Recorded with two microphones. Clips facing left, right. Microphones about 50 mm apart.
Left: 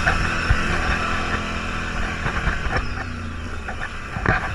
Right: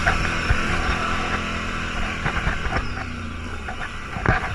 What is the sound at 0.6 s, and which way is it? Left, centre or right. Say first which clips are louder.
Vehicle: left 1 dB; left.